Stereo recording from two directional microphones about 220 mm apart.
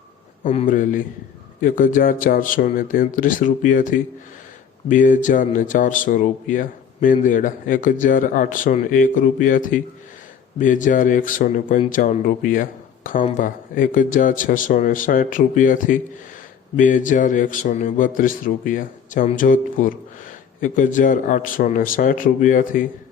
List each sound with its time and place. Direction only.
0.4 s speech: 30° left (ahead or behind)